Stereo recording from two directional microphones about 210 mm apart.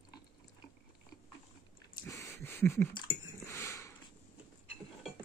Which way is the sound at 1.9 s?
15° left (ahead or behind).